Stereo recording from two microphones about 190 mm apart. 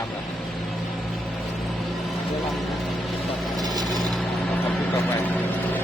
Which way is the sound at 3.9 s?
Centre (ahead or behind).